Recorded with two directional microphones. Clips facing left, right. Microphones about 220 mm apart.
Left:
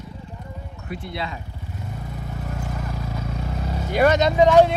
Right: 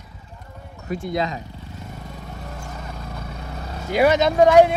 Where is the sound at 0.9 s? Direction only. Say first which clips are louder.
Right 6 dB; 45° right (ahead or behind).